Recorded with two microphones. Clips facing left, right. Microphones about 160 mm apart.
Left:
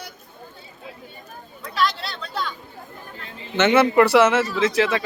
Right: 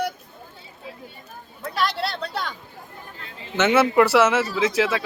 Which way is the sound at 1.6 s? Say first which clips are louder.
Even; 60° right (ahead or behind).